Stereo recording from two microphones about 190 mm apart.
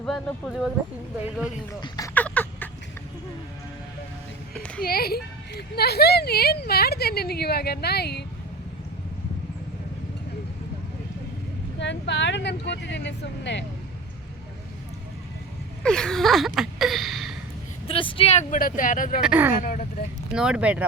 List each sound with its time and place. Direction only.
0.0 s speech: 5° left (ahead or behind)
2.1 s a sound: 10° left (ahead or behind)
4.8 s speech: 55° left (ahead or behind)
11.8 s speech: 70° left (ahead or behind)
15.8 s a sound: 5° left (ahead or behind)
17.8 s speech: 30° left (ahead or behind); by 19.2 s 45° left (ahead or behind)
19.2 s speech: 10° right (ahead or behind)
19.6 s speech: 45° left (ahead or behind)
20.3 s speech: 5° right (ahead or behind)